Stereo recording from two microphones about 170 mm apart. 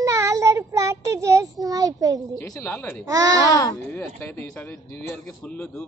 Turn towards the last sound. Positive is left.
turn(degrees=5)  # may be behind; listen again after turning